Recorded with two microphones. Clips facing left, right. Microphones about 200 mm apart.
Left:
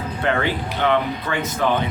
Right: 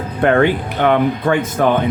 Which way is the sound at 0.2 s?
50° right (ahead or behind).